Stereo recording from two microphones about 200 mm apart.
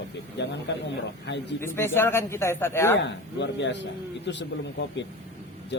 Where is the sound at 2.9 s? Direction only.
60° left (ahead or behind).